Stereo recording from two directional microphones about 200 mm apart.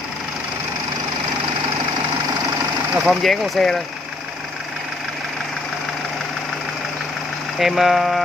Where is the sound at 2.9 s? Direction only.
Centre (ahead or behind).